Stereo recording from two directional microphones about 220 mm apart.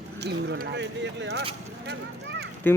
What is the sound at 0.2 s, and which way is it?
Speech, 50° right (ahead or behind).